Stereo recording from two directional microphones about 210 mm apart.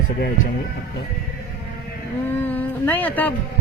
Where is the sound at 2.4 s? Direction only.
10° left (ahead or behind).